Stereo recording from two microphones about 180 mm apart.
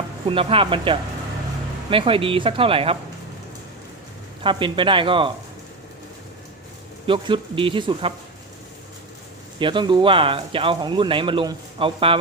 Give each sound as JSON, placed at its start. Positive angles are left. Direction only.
{"t": 0.3, "sound": "speech", "side_deg": -30}
{"t": 4.4, "sound": "speech", "side_deg": -30}
{"t": 7.1, "sound": "speech", "side_deg": -30}
{"t": 9.6, "sound": "speech", "side_deg": -25}